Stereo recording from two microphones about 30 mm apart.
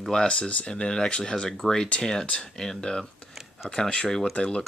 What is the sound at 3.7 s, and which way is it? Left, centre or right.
Speech, left.